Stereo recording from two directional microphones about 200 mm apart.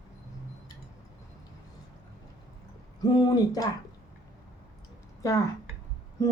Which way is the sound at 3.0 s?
20° left (ahead or behind).